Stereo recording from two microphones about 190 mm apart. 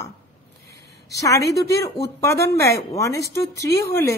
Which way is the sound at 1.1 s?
15° left (ahead or behind).